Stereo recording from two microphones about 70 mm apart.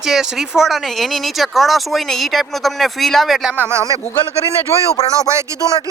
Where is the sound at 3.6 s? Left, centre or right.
Right.